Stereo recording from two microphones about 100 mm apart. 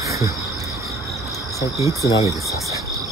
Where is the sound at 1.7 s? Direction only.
30° right (ahead or behind).